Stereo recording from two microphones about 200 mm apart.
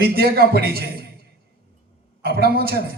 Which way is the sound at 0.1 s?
50° right (ahead or behind).